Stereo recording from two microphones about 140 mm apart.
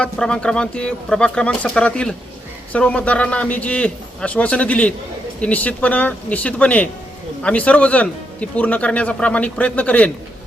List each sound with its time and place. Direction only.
0.0 s speech: 5° left (ahead or behind)